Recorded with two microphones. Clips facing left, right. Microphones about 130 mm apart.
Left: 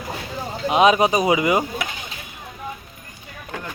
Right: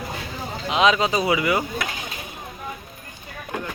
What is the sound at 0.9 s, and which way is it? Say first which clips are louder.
Speech: left 2 dB; 20° left (ahead or behind).